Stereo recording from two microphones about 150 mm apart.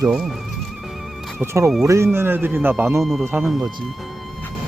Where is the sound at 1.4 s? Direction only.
20° right (ahead or behind).